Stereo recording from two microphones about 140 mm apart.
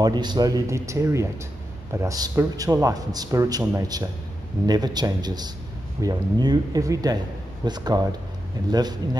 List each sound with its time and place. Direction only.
0.0 s speech: 30° right (ahead or behind)